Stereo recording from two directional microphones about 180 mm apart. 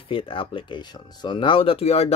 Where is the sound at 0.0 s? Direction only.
30° left (ahead or behind).